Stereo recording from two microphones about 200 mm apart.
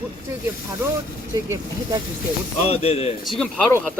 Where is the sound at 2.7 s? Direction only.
30° left (ahead or behind).